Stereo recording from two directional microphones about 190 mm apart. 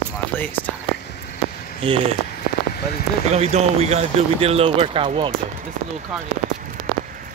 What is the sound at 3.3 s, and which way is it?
Speech, 35° right (ahead or behind).